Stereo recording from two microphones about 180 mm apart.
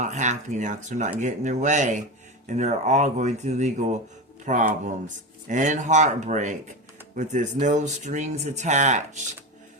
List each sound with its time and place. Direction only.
0.0 s speech: 40° right (ahead or behind)